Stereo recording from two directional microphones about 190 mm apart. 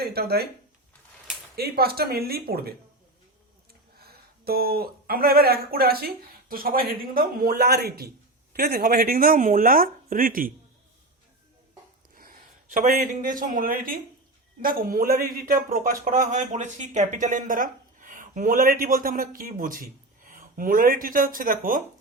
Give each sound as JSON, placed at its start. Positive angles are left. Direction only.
{"t": 0.0, "sound": "speech", "side_deg": -55}
{"t": 1.5, "sound": "speech", "side_deg": -55}
{"t": 12.1, "sound": "speech", "side_deg": -45}